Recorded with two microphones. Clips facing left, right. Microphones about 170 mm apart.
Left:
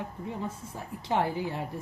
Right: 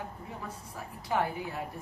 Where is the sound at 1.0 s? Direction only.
30° left (ahead or behind).